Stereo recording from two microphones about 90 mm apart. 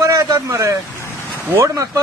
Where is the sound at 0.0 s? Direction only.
40° right (ahead or behind).